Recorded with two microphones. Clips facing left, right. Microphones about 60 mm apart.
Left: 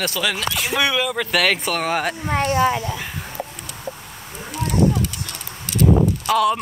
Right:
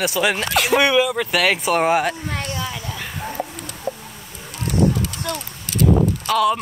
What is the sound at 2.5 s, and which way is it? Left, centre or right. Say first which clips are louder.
Speech: left 10 dB; left.